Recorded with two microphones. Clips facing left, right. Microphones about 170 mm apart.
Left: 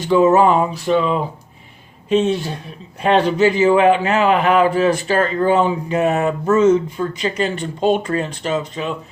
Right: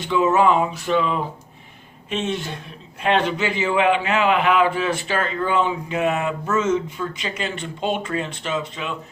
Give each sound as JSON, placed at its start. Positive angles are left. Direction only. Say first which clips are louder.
{"t": 0.0, "sound": "a man's voice", "louder": "left 5 dB", "side_deg": 40}